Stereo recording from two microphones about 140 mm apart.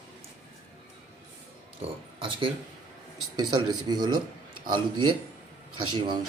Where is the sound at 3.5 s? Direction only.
30° right (ahead or behind).